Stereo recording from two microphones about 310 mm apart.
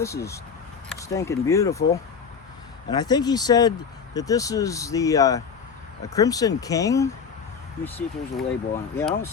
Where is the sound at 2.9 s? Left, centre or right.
Centre.